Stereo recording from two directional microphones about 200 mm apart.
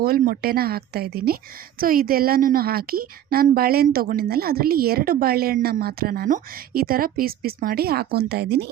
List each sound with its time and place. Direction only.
0.0 s a woman's voice: 50° right (ahead or behind)